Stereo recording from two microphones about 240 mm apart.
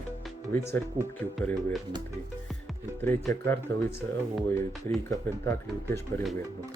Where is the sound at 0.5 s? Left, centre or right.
Centre.